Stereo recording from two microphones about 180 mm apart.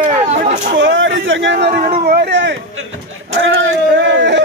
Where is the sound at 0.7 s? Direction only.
90° right.